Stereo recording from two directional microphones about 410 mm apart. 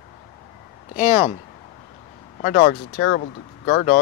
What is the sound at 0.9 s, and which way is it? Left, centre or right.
Speech, centre.